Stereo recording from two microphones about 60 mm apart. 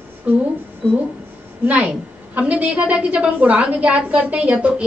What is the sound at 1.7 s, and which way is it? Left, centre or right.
A woman's voice, right.